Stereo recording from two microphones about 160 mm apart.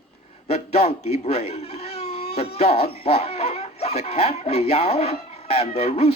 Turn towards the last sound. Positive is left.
turn(degrees=40)  # may be behind; listen again after turning